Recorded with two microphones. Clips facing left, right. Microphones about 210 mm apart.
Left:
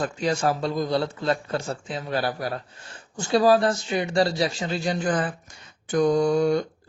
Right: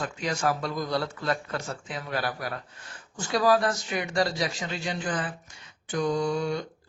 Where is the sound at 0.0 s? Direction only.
30° left (ahead or behind).